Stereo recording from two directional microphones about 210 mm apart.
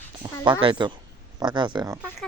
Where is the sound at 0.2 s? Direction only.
25° right (ahead or behind).